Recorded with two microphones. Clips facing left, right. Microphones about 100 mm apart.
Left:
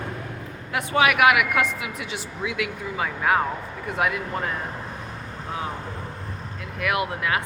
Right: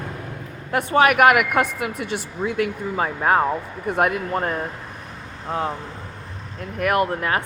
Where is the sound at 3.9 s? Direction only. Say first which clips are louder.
Right 5 dB; 50° right (ahead or behind).